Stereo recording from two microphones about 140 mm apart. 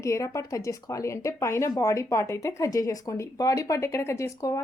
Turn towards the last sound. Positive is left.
turn(degrees=20)  # may be behind; listen again after turning